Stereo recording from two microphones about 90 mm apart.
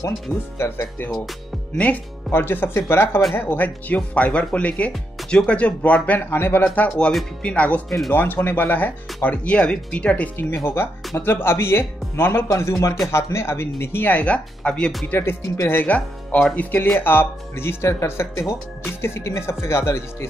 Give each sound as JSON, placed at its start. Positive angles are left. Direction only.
{"t": 0.6, "sound": "speech", "side_deg": 25}
{"t": 10.3, "sound": "speech", "side_deg": 25}
{"t": 15.0, "sound": "speech", "side_deg": 25}
{"t": 15.8, "sound": "speech", "side_deg": 15}